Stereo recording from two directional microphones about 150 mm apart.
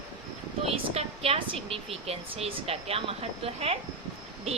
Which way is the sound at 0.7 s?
40° right (ahead or behind).